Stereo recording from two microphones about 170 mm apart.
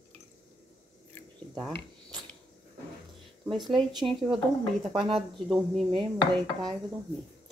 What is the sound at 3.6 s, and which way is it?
Speech, centre (ahead or behind).